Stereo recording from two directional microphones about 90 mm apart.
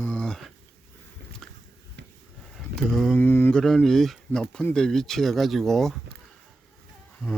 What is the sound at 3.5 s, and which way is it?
Speech, 5° left (ahead or behind).